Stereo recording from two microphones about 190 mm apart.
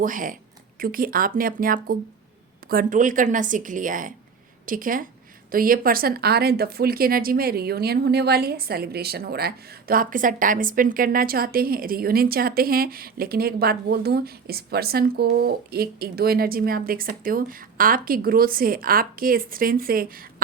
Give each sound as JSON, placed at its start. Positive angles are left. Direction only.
{"t": 0.0, "sound": "speech", "side_deg": -45}